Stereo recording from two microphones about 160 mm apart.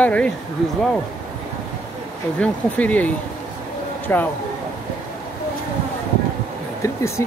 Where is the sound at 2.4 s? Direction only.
10° left (ahead or behind).